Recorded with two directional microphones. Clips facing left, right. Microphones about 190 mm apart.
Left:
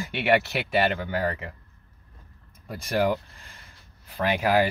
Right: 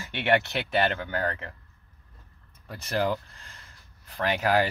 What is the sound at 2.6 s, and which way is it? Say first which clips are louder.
A man's voice: left 3 dB; 10° left (ahead or behind).